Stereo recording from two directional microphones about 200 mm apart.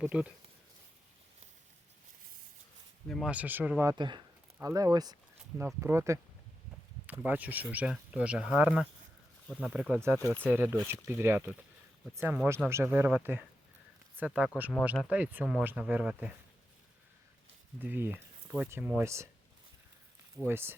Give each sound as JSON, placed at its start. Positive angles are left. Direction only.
{"t": 0.0, "sound": "speech", "side_deg": -5}
{"t": 3.1, "sound": "speech", "side_deg": 0}
{"t": 3.9, "sound": "speech", "side_deg": -25}
{"t": 17.7, "sound": "speech", "side_deg": -10}
{"t": 20.4, "sound": "speech", "side_deg": -10}